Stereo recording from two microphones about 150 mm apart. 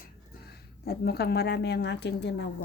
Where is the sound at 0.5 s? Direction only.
90° left.